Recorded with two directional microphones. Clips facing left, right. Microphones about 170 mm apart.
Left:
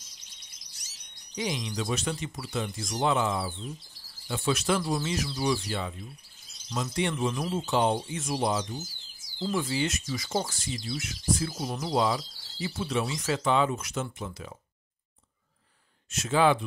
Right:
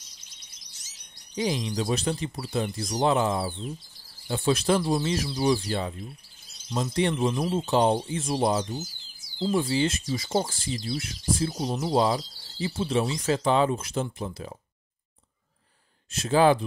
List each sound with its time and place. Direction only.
1.3 s speech: 30° right (ahead or behind)
16.1 s speech: 35° right (ahead or behind)